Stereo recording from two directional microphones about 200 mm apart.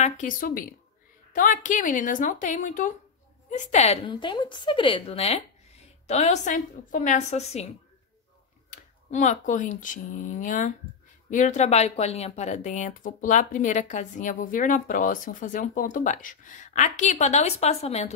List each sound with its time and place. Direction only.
0.0 s speech: 40° left (ahead or behind)